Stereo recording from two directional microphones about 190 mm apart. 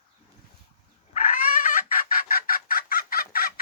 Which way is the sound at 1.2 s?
45° left (ahead or behind).